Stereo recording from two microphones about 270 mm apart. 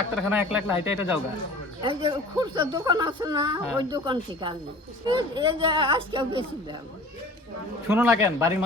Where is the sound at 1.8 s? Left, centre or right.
Centre.